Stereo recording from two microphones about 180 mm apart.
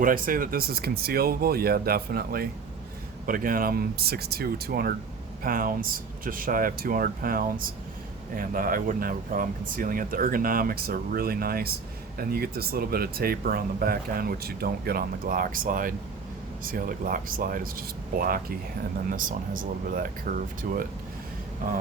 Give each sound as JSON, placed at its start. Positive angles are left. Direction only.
{"t": 0.0, "sound": "speech", "side_deg": -50}